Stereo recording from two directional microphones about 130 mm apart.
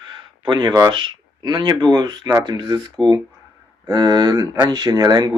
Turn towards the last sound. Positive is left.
turn(degrees=-30)  # may be behind; listen again after turning